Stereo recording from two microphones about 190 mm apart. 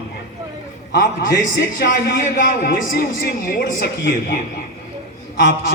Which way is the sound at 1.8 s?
50° left (ahead or behind).